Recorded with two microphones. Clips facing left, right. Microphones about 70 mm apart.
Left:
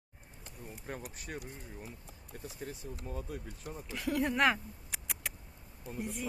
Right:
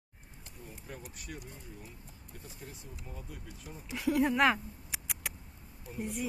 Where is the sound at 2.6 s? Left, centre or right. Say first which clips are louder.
Left 7 dB; left.